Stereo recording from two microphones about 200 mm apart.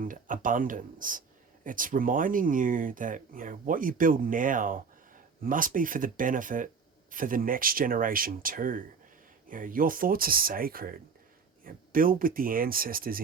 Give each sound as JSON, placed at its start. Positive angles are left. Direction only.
{"t": 0.0, "sound": "speech", "side_deg": -40}